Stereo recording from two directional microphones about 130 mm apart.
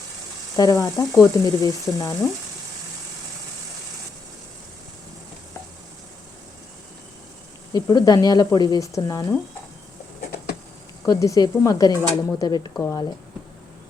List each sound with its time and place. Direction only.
0.5 s sizzle: 30° left (ahead or behind)
7.7 s speech: 30° left (ahead or behind)
8.5 s sizzle: 30° left (ahead or behind)
11.0 s sizzle: 25° left (ahead or behind)